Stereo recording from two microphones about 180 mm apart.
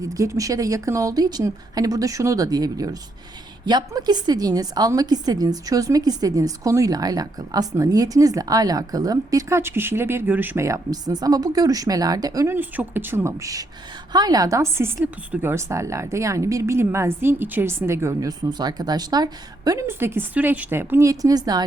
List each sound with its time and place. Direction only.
0.0 s a woman's voice: 20° right (ahead or behind)